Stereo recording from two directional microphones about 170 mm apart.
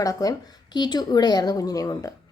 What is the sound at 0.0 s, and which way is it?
A child's voice, 20° left (ahead or behind).